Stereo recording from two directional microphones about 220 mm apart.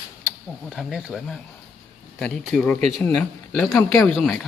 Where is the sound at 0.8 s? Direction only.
Centre (ahead or behind).